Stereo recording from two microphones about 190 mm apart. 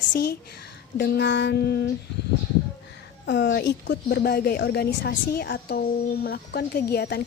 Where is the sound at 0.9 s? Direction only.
60° left (ahead or behind).